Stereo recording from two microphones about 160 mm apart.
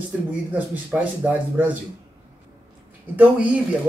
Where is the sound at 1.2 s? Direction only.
10° right (ahead or behind).